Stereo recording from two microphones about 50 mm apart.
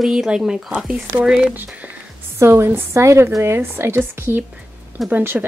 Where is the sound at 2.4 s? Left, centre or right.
Right.